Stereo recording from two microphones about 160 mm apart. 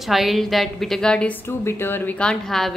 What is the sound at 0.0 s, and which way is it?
A woman's voice, centre (ahead or behind).